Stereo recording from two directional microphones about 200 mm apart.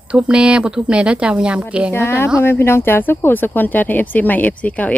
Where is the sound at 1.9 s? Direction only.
10° left (ahead or behind).